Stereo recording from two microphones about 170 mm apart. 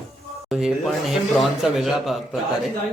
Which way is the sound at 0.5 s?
Centre (ahead or behind).